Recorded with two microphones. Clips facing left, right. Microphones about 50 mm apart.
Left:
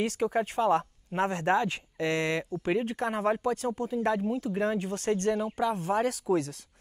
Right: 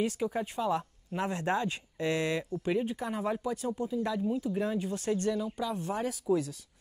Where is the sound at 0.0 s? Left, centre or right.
Left.